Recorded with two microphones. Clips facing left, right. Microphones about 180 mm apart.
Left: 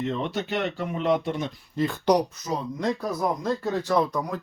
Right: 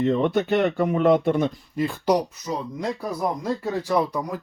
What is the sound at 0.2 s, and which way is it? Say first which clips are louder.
Speech: right 7 dB; 55° right (ahead or behind).